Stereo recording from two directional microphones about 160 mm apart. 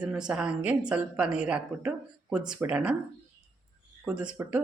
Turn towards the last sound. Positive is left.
turn(degrees=-10)  # may be behind; listen again after turning